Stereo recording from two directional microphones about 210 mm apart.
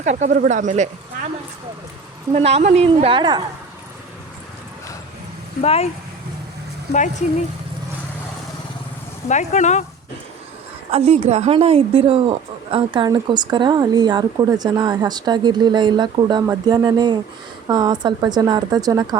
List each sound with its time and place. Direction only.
0.0 s speech: 35° right (ahead or behind)
2.3 s a woman's voice: 30° right (ahead or behind)
5.6 s speech: 30° left (ahead or behind)
6.9 s speech: 35° left (ahead or behind)
9.3 s speech: 35° left (ahead or behind)
10.9 s a woman's voice: 30° right (ahead or behind)